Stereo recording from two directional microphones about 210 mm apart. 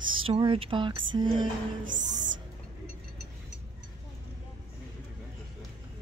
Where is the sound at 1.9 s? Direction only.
35° right (ahead or behind).